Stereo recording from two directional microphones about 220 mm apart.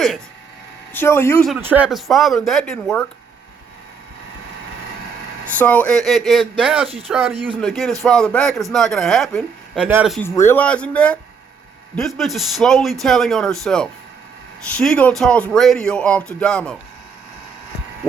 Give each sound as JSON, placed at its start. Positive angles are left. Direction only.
{"t": 0.9, "sound": "speech", "side_deg": 10}
{"t": 1.5, "sound": "speech", "side_deg": -5}
{"t": 5.5, "sound": "speech", "side_deg": 5}
{"t": 6.8, "sound": "speech", "side_deg": -25}
{"t": 7.1, "sound": "speech", "side_deg": -5}
{"t": 7.3, "sound": "speech", "side_deg": -25}
{"t": 7.6, "sound": "speech", "side_deg": 0}
{"t": 10.2, "sound": "speech", "side_deg": 10}